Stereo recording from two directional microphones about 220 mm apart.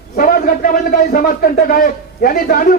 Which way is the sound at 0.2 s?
40° left (ahead or behind).